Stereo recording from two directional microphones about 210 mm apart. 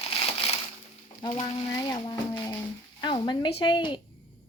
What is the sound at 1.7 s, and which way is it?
Speech, 15° left (ahead or behind).